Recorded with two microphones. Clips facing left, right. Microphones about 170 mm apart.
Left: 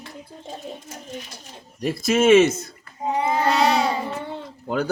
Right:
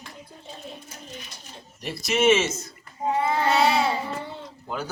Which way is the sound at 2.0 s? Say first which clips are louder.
Left 6 dB; 55° left (ahead or behind).